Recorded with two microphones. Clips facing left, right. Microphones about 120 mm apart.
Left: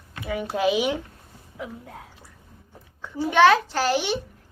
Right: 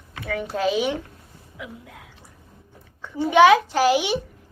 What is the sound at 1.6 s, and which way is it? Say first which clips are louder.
Speech: left 3 dB; 35° left (ahead or behind).